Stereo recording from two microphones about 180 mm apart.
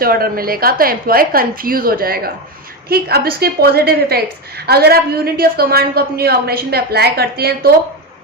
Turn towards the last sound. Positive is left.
turn(degrees=-60)  # may be behind; listen again after turning